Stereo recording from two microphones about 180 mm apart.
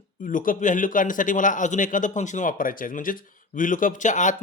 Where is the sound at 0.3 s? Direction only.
50° left (ahead or behind).